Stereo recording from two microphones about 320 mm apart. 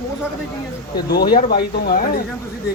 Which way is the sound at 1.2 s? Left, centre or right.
Left.